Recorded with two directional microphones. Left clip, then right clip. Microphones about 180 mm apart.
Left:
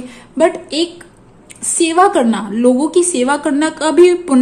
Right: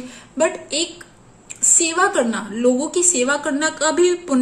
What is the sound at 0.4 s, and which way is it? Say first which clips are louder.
A woman's voice: left 6 dB; 40° left (ahead or behind).